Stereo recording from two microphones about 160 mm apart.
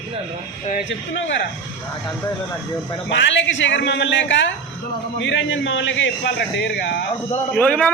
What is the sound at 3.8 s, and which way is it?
Speech, 90° left.